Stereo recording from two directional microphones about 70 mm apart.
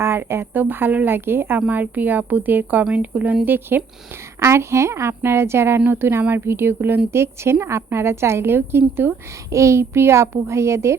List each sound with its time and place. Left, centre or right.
0.0 s a woman's voice: right
4.4 s a woman's voice: right
9.5 s a woman's voice: right